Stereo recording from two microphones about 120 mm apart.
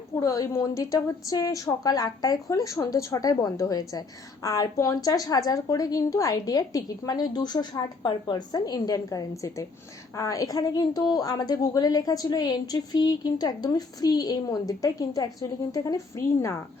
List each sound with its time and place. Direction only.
0.2 s a woman's voice: 30° left (ahead or behind)